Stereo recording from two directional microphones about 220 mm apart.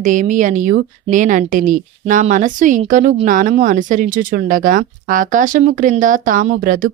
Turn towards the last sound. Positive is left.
turn(degrees=-40)  # may be behind; listen again after turning